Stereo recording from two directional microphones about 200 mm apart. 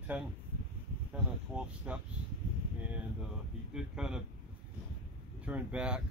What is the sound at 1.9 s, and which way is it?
Speech, 5° right (ahead or behind).